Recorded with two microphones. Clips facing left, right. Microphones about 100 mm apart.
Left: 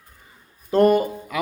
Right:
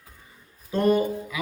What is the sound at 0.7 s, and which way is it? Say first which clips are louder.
Speech: left 5 dB; 65° left (ahead or behind).